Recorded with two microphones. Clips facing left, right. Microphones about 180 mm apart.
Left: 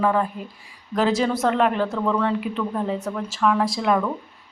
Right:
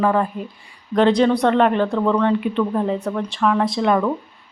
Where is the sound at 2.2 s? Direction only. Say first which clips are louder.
Right 5 dB; centre (ahead or behind).